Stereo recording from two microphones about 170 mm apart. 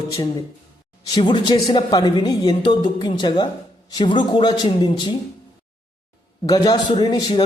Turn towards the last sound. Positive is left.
turn(degrees=25)  # may be behind; listen again after turning